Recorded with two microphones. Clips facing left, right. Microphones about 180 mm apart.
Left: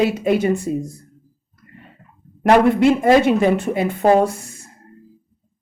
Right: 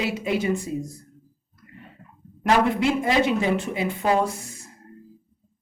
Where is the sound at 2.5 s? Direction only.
55° left (ahead or behind).